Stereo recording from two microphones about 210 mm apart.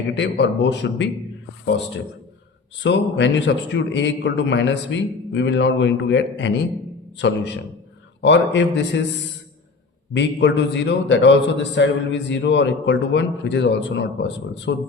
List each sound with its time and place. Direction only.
0.1 s a man's voice: 55° left (ahead or behind)
2.8 s a man's voice: 60° left (ahead or behind)
10.2 s a man's voice: 55° left (ahead or behind)